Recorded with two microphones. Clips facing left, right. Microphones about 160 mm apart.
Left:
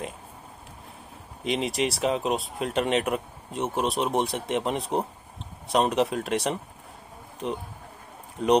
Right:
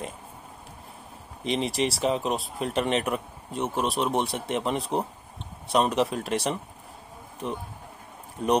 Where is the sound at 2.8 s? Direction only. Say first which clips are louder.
Left 2 dB; 40° right (ahead or behind).